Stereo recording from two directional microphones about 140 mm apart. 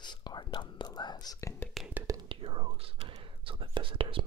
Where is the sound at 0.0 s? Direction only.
30° left (ahead or behind).